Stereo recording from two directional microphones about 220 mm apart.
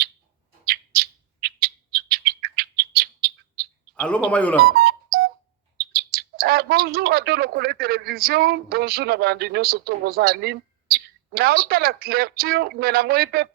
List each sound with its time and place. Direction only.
0.6 s bird: 45° right (ahead or behind)
3.9 s a man's voice: 5° left (ahead or behind)
4.6 s music: 45° right (ahead or behind)
5.8 s speech: 45° right (ahead or behind)